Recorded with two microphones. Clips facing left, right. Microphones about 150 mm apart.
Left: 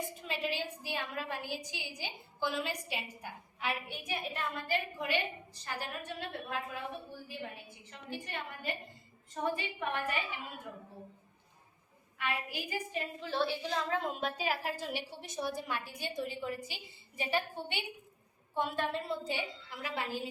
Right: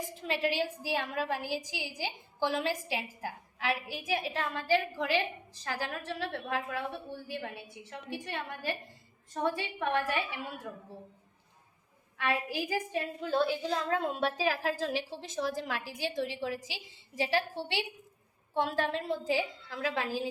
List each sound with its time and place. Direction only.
0.0 s a woman's voice: 90° right
7.3 s a woman's voice: 70° right (ahead or behind)
12.1 s a woman's voice: 90° right
14.2 s a woman's voice: 85° right